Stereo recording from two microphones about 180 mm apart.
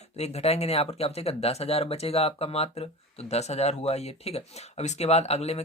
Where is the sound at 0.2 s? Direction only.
35° left (ahead or behind).